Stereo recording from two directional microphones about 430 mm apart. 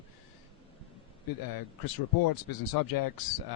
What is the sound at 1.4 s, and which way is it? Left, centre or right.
Speech, left.